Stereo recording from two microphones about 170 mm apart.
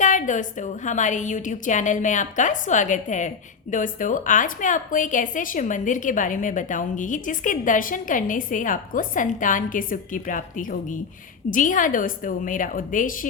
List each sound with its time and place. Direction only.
0.0 s a woman's voice: 45° left (ahead or behind)